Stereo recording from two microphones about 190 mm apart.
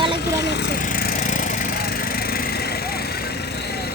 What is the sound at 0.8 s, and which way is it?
Splinter, 50° left (ahead or behind).